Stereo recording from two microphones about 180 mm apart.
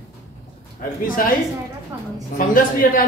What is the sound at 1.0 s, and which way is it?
Speech, 50° left (ahead or behind).